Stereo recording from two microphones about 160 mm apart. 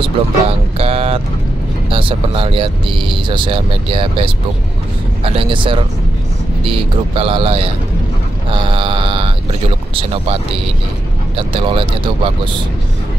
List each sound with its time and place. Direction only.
0.0 s speech: 35° right (ahead or behind)